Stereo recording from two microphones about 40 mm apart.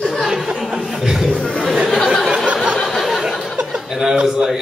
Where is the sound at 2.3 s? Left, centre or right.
Right.